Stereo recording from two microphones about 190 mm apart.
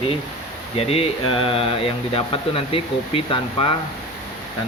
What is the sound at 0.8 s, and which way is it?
Speech, 30° left (ahead or behind).